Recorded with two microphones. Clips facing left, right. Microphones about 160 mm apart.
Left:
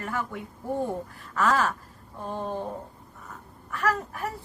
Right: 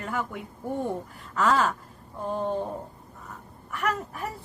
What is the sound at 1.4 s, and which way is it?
Speech, 20° right (ahead or behind).